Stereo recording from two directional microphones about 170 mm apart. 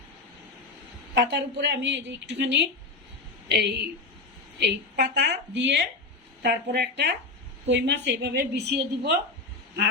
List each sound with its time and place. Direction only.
1.3 s speech: 90° right
3.5 s a woman's voice: 80° right
6.4 s a woman's voice: 75° right (ahead or behind)